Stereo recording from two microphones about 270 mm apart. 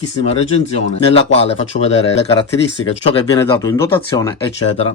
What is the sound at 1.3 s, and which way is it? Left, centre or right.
Speech, left.